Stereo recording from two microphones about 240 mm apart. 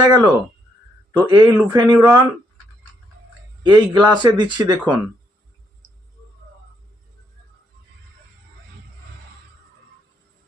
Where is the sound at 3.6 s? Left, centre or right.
Centre.